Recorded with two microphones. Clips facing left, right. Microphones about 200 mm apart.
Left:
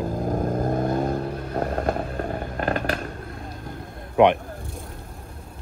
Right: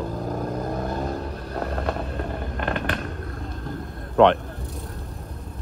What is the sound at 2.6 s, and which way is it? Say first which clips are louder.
Fireworks: left 2 dB; 40° left (ahead or behind).